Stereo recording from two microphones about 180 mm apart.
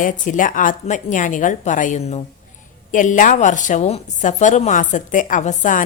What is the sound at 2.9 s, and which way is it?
A woman's voice, 45° left (ahead or behind).